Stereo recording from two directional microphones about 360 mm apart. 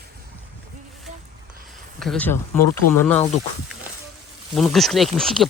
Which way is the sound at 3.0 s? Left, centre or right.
Centre.